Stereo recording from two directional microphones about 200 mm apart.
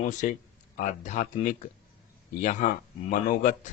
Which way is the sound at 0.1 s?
40° left (ahead or behind).